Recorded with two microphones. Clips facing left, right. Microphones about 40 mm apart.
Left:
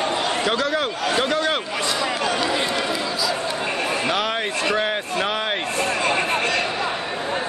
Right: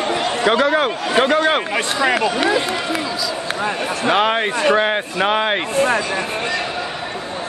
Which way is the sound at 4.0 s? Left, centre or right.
Right.